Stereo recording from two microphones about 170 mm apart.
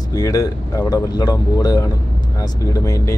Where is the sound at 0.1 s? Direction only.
20° left (ahead or behind).